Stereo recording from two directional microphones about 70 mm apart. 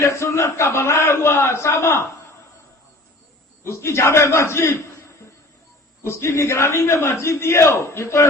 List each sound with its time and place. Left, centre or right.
0.0 s a man's voice: left
3.6 s a man's voice: left
6.0 s a man's voice: left